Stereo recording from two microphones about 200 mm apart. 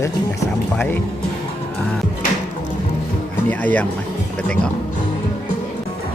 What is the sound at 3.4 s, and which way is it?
Speech, 10° left (ahead or behind).